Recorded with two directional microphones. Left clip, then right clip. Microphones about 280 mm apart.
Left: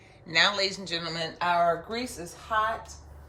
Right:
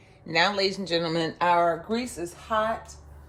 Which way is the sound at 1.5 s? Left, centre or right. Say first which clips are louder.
Right 1 dB; right.